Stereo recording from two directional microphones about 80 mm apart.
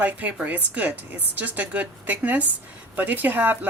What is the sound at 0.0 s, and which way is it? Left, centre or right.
Speech, right.